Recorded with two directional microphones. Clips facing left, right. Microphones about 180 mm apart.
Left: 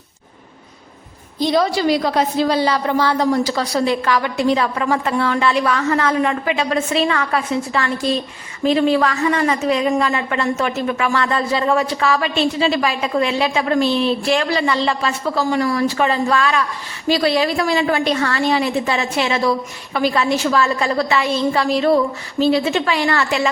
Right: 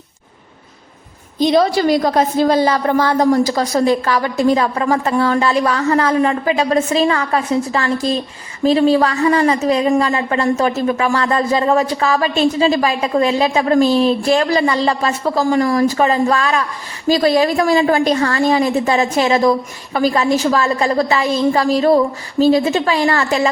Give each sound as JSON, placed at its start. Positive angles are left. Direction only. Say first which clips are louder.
{"t": 1.4, "sound": "a woman's voice", "louder": "right 4 dB", "side_deg": -20}
{"t": 1.7, "sound": "a woman's voice", "louder": "right 3 dB", "side_deg": -45}